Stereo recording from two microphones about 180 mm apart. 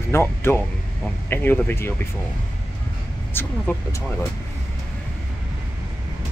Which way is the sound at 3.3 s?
10° left (ahead or behind).